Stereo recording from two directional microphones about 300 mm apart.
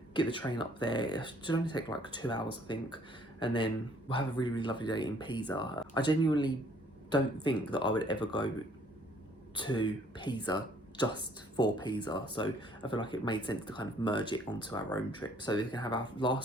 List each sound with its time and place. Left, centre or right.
0.1 s speech: centre
7.7 s speech: centre
9.6 s speech: centre